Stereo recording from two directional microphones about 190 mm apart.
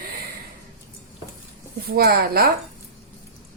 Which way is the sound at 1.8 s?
55° right (ahead or behind).